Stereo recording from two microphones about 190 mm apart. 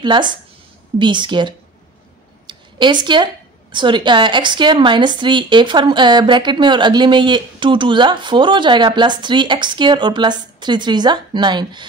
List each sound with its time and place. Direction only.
0.0 s a woman's voice: 25° right (ahead or behind)
2.4 s a sound: 25° right (ahead or behind)
3.7 s a woman's voice: 25° right (ahead or behind)